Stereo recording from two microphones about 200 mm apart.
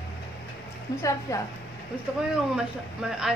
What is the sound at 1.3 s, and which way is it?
Speech, 15° left (ahead or behind).